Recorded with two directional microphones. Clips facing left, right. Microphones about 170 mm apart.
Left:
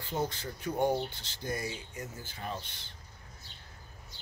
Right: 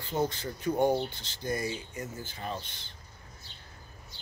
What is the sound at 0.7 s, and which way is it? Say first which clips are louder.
Speech: right 3 dB; 25° right (ahead or behind).